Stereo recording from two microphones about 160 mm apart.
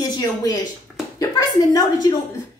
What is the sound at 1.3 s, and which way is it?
Speech, 25° left (ahead or behind).